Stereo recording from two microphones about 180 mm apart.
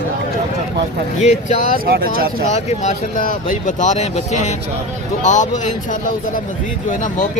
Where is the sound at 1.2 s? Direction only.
40° left (ahead or behind).